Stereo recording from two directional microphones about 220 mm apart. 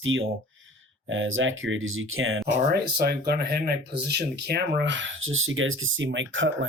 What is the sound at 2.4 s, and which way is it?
Speech, 45° right (ahead or behind).